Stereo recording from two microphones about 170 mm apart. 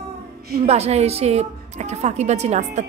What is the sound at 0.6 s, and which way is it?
A woman's voice, 40° right (ahead or behind).